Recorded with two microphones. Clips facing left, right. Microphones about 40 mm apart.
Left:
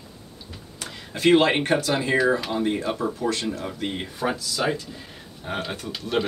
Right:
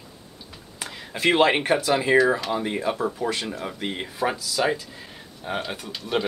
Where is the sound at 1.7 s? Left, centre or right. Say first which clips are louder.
Right 2 dB; centre.